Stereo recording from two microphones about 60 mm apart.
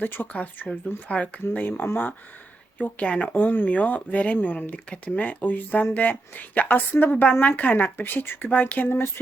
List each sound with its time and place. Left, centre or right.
0.0 s a woman's voice: left